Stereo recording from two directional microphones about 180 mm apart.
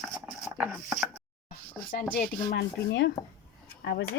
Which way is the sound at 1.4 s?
50° left (ahead or behind).